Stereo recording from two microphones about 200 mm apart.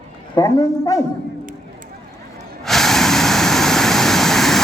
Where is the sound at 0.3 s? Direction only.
20° left (ahead or behind).